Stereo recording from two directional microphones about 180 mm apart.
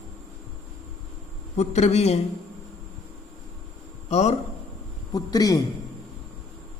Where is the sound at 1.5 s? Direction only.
40° left (ahead or behind).